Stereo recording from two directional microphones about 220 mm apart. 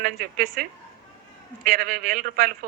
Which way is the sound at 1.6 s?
40° right (ahead or behind).